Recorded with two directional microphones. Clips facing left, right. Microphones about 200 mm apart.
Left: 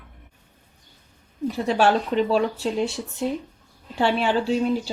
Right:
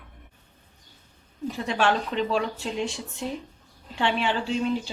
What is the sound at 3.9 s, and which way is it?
Speech, 40° left (ahead or behind).